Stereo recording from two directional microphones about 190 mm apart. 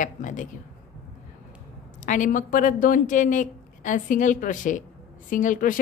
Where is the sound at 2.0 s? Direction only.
45° left (ahead or behind).